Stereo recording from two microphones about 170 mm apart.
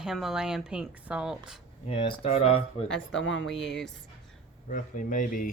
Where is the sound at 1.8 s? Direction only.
35° left (ahead or behind).